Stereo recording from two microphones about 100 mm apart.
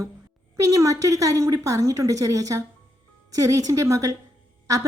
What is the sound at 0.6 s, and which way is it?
A woman's voice, 35° right (ahead or behind).